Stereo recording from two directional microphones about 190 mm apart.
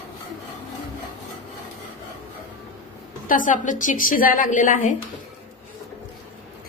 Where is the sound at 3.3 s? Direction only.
45° left (ahead or behind).